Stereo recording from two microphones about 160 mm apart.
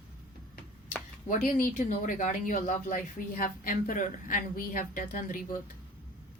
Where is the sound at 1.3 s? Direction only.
60° left (ahead or behind).